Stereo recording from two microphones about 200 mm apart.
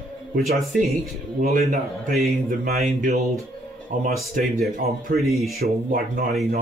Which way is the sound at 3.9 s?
40° right (ahead or behind).